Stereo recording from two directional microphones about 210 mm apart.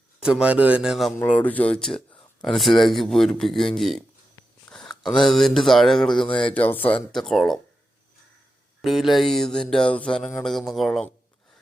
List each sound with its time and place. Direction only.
0.2 s music: 5° right (ahead or behind)
1.2 s speech: 5° left (ahead or behind)
2.4 s music: centre (ahead or behind)
4.4 s speech: centre (ahead or behind)
6.3 s music: 5° left (ahead or behind)
8.8 s music: centre (ahead or behind)